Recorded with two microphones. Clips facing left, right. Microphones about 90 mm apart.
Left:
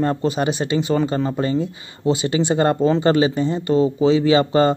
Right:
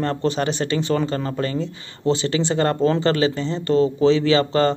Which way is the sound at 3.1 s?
20° left (ahead or behind).